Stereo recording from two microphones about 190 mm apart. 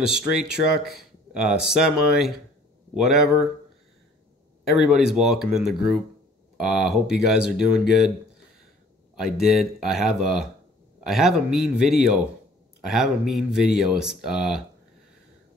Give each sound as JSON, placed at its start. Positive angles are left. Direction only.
{"t": 0.0, "sound": "speech", "side_deg": -5}
{"t": 4.6, "sound": "speech", "side_deg": 0}
{"t": 9.2, "sound": "speech", "side_deg": 0}